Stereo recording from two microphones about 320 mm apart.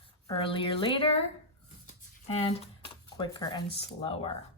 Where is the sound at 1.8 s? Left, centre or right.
Centre.